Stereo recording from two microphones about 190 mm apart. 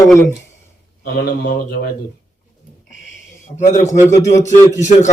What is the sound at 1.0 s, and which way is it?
Speech, 55° left (ahead or behind).